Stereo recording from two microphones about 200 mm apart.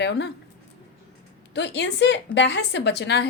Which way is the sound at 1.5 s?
60° left (ahead or behind).